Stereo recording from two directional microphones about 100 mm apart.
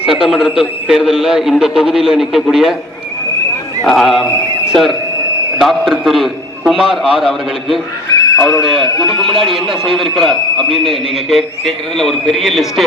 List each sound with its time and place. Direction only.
0.3 s speech: 5° right (ahead or behind)
3.8 s a man's voice: centre (ahead or behind)
8.2 s a sound: 40° left (ahead or behind)
8.6 s speech: centre (ahead or behind)